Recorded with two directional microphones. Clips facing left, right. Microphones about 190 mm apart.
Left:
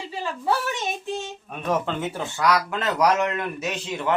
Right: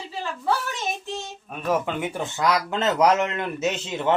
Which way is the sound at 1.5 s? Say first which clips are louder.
Right 1 dB; 5° right (ahead or behind).